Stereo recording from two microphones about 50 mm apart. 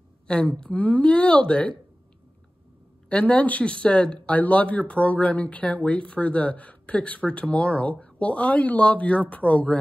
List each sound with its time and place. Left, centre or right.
0.3 s speech: left
3.1 s speech: left